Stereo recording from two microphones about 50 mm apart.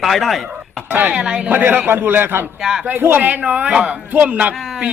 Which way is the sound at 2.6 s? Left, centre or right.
Centre.